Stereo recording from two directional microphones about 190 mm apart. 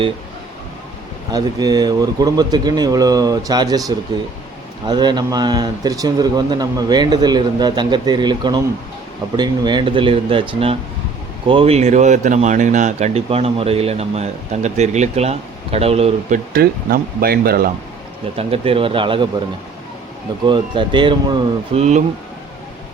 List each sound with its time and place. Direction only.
1.3 s speech: 20° right (ahead or behind)
16.5 s speech: 50° right (ahead or behind)
18.3 s speech: 30° right (ahead or behind)
20.4 s speech: 25° right (ahead or behind)